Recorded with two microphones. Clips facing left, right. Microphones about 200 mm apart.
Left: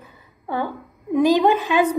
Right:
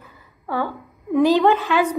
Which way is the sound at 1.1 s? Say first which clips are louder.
Right 1 dB; 15° left (ahead or behind).